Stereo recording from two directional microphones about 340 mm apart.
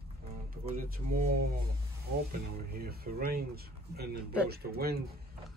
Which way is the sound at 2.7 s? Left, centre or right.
Right.